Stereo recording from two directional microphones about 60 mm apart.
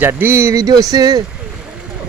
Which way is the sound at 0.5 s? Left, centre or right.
Right.